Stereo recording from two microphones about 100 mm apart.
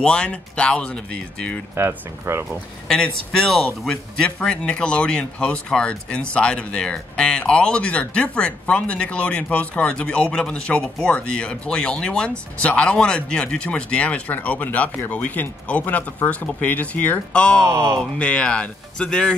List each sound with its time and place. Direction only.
0.0 s speech: 10° left (ahead or behind)
1.8 s speech: 25° right (ahead or behind)
2.9 s speech: 5° left (ahead or behind)
17.6 s speech: 30° right (ahead or behind)
17.9 s speech: 10° left (ahead or behind)